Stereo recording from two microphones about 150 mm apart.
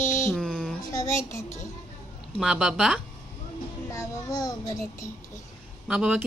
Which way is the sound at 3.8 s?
20° left (ahead or behind).